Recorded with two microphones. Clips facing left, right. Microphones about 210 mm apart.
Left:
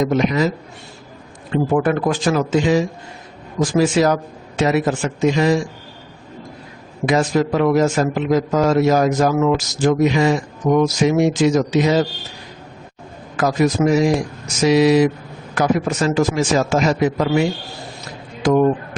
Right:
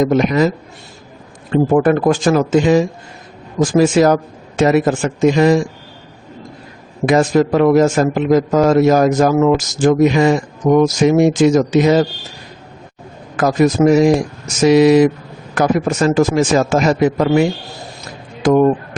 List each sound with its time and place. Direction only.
0.0 s a man's voice: 50° right (ahead or behind)
1.7 s a man's voice: 45° right (ahead or behind)
7.0 s a man's voice: 50° right (ahead or behind)
13.3 s a man's voice: 50° right (ahead or behind)
18.4 s speech: 55° right (ahead or behind)